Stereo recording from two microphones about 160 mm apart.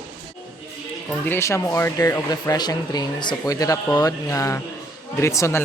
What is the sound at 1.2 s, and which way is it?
Speech, 15° left (ahead or behind).